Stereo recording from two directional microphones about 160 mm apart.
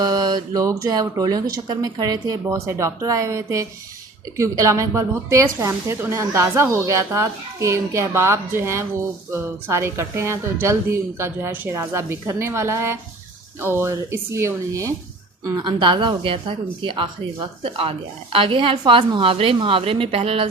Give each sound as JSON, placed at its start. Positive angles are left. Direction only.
{"t": 0.0, "sound": "a woman's voice", "side_deg": -25}